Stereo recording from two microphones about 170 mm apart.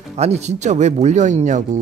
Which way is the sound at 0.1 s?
40° right (ahead or behind).